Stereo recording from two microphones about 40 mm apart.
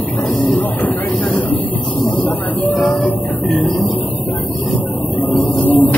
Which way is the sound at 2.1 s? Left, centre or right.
Left.